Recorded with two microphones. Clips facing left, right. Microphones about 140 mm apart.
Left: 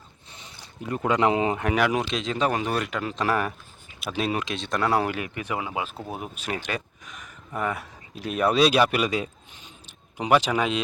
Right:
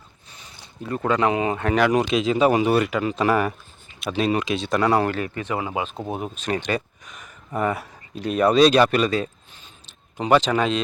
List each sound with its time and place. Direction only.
0.3 s speech: 25° left (ahead or behind)